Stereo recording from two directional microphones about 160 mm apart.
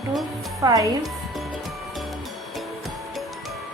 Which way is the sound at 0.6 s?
20° right (ahead or behind).